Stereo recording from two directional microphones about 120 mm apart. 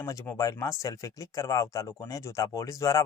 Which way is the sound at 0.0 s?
25° left (ahead or behind).